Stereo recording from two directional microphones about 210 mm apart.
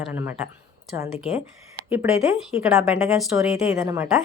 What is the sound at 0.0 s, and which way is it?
Speech, 10° right (ahead or behind).